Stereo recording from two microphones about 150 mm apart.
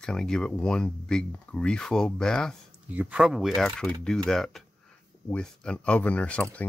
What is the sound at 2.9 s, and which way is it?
Speech, 10° right (ahead or behind).